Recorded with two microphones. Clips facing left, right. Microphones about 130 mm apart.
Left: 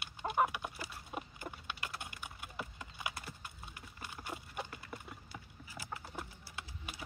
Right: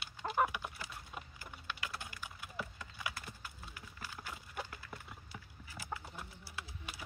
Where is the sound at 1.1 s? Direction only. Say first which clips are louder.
Left 5 dB; 20° left (ahead or behind).